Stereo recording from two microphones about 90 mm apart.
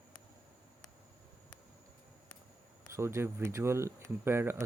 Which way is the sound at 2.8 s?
30° right (ahead or behind).